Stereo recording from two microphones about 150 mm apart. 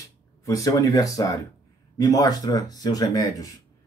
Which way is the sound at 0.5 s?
20° left (ahead or behind).